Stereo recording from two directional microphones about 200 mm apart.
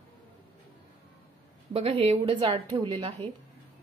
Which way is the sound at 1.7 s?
30° right (ahead or behind).